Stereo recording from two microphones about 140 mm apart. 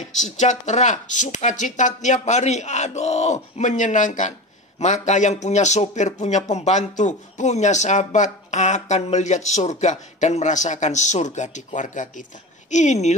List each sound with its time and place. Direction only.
0.2 s speech: 60° left (ahead or behind)